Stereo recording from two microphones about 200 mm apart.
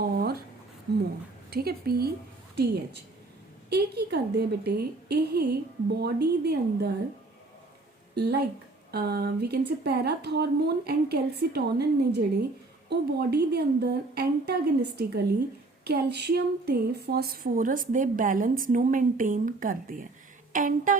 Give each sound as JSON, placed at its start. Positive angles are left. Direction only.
{"t": 0.2, "sound": "a sound", "side_deg": -50}
{"t": 1.5, "sound": "speech", "side_deg": -50}
{"t": 3.7, "sound": "a woman's voice", "side_deg": -55}
{"t": 8.1, "sound": "a woman's voice", "side_deg": -55}